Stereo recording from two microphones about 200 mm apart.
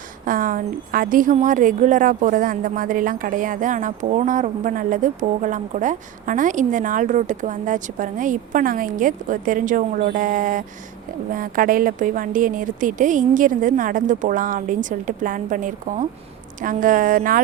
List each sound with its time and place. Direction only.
0.3 s a woman's voice: 45° right (ahead or behind)